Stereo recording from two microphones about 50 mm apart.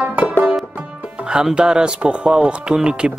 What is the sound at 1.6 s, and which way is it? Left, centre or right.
Speech, centre.